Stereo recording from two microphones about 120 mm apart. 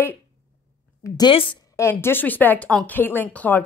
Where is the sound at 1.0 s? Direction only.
30° left (ahead or behind).